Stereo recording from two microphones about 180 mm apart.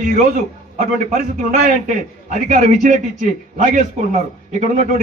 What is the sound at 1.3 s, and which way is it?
A man's voice, 45° right (ahead or behind).